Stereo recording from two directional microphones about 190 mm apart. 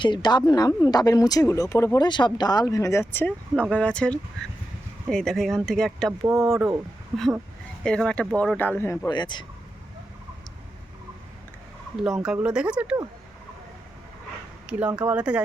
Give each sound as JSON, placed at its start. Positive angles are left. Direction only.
{"t": 0.0, "sound": "speech", "side_deg": 25}
{"t": 12.0, "sound": "speech", "side_deg": -5}
{"t": 14.7, "sound": "speech", "side_deg": -5}